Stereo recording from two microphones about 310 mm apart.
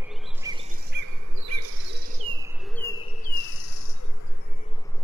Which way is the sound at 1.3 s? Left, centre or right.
Right.